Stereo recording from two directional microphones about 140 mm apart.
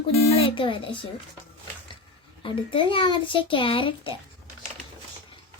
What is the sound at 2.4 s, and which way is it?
A child's voice, 35° left (ahead or behind).